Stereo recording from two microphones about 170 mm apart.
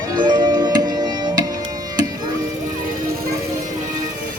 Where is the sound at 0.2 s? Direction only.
25° right (ahead or behind).